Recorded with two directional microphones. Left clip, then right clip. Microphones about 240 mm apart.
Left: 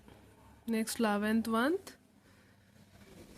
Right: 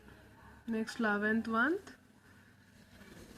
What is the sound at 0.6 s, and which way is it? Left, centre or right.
Speech, left.